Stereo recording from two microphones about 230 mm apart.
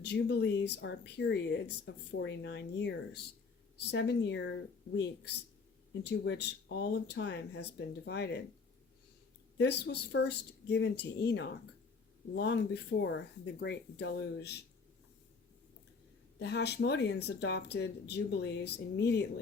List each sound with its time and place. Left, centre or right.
0.0 s speech: left
9.6 s speech: left
16.4 s speech: left